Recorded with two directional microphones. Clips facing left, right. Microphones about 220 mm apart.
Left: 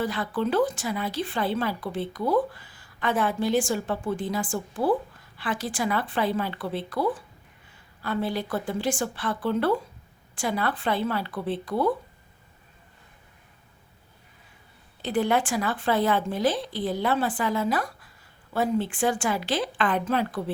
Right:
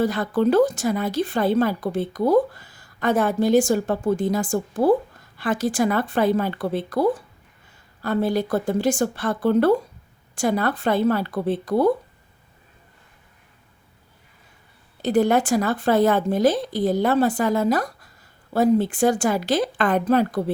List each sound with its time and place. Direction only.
0.0 s speech: 45° right (ahead or behind)
15.0 s speech: 40° right (ahead or behind)